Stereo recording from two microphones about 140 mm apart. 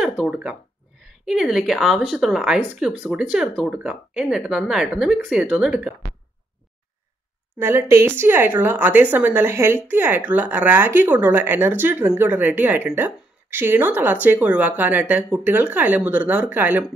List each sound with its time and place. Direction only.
0.0 s speech: 5° right (ahead or behind)
7.5 s speech: 15° right (ahead or behind)